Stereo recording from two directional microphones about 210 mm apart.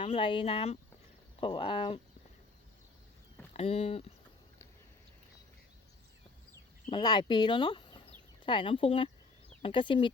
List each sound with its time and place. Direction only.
0.0 s speech: 25° left (ahead or behind)
3.5 s speech: 30° left (ahead or behind)
6.9 s speech: 20° left (ahead or behind)